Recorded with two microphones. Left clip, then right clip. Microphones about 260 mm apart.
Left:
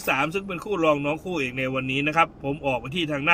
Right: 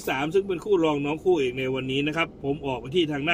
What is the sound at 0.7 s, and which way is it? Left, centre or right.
Speech, left.